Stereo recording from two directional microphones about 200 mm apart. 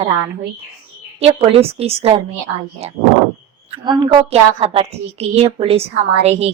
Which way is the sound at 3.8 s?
20° right (ahead or behind).